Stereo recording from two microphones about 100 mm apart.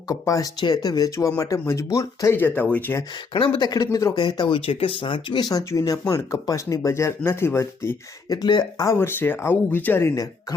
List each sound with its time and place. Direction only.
0.1 s speech: 35° left (ahead or behind); by 3.0 s 15° left (ahead or behind)
3.3 s speech: 55° left (ahead or behind); by 8.4 s 30° left (ahead or behind)
8.4 s speech: 45° left (ahead or behind)
8.9 s speech: 20° left (ahead or behind)